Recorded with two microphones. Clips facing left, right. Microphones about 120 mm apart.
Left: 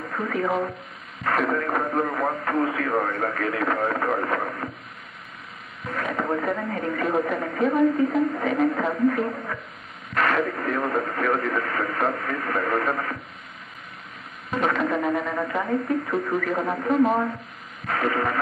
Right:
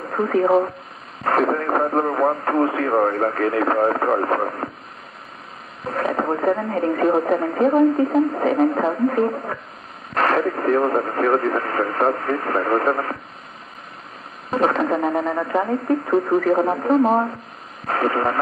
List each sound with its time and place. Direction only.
0.1 s speech: 35° right (ahead or behind)
5.9 s speech: 35° right (ahead or behind)
14.5 s speech: 35° right (ahead or behind)